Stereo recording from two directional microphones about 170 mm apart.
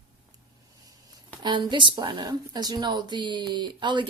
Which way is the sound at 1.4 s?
25° right (ahead or behind).